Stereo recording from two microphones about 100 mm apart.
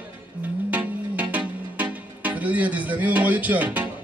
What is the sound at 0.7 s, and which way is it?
Music, 15° right (ahead or behind).